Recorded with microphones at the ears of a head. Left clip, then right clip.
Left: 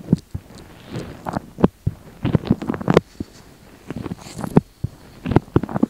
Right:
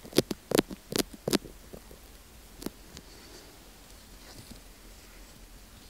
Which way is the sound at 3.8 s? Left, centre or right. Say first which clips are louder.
Left 19 dB; left.